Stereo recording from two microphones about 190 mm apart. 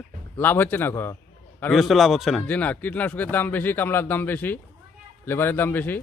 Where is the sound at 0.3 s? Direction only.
10° left (ahead or behind).